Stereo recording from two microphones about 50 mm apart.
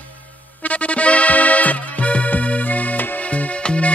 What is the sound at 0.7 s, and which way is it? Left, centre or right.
Music, left.